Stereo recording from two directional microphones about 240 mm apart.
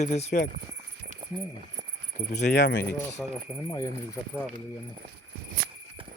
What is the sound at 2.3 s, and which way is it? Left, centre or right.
Speech, left.